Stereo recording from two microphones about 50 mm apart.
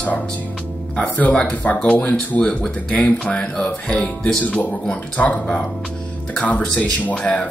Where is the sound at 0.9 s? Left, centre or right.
Left.